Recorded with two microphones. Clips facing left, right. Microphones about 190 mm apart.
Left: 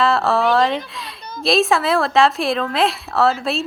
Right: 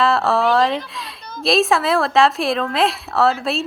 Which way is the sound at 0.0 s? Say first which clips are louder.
Even; centre (ahead or behind).